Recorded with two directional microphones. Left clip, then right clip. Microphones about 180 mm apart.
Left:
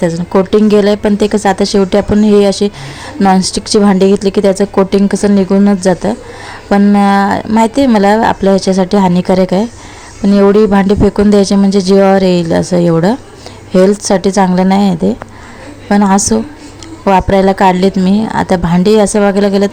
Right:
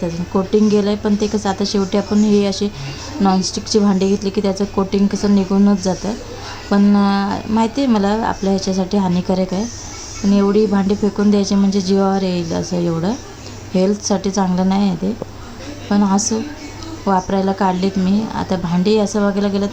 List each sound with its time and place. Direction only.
0.0 s a woman's voice: 40° left (ahead or behind)